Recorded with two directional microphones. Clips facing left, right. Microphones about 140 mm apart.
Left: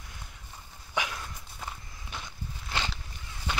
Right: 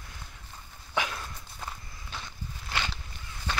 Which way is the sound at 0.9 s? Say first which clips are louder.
Right 1 dB; 15° left (ahead or behind).